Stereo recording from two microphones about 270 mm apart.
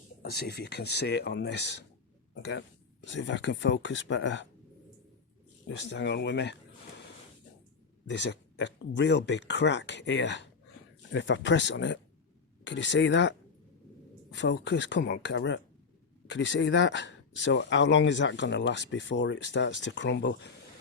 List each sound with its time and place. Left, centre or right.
0.2 s speech: left
5.6 s speech: left
8.0 s a sound: left
9.0 s speech: left
14.3 s speech: left